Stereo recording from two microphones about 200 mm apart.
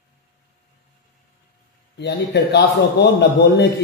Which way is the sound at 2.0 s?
55° left (ahead or behind).